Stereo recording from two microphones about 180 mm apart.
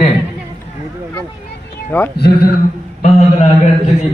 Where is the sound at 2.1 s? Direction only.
60° left (ahead or behind).